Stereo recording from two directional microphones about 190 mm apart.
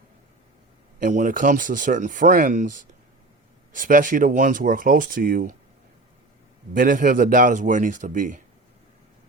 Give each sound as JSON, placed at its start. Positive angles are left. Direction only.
{"t": 0.9, "sound": "speech", "side_deg": -45}
{"t": 6.7, "sound": "speech", "side_deg": -45}